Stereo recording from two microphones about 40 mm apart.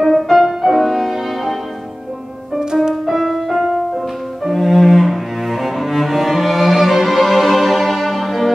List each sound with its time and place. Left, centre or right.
0.0 s music: centre
2.6 s music: centre
2.9 s music: centre
4.5 s cello: centre